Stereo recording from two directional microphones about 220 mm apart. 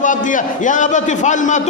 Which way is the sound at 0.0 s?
35° left (ahead or behind).